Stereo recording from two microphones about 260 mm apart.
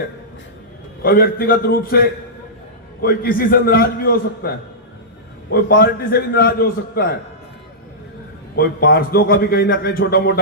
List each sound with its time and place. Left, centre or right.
1.0 s a man's voice: left
8.5 s a man's voice: left